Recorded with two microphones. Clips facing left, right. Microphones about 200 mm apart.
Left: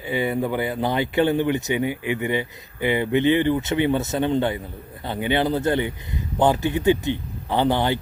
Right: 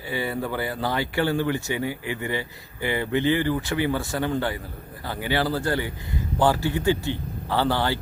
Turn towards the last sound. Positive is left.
turn(degrees=20)  # may be behind; listen again after turning